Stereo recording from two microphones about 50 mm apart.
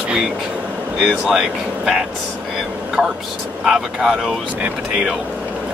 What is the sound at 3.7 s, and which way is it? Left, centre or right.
Speech, centre.